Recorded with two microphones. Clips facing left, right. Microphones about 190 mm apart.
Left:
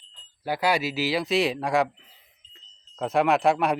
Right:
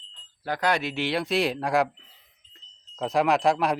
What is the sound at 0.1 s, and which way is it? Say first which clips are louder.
Speech: left 2 dB; 10° left (ahead or behind).